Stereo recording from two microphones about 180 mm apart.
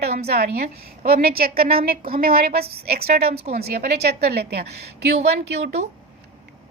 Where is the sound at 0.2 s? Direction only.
60° right (ahead or behind).